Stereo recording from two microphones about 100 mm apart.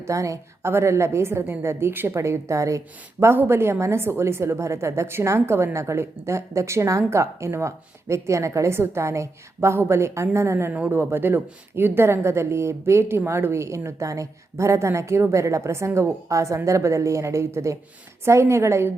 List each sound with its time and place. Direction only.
0.0 s a woman's voice: 30° right (ahead or behind)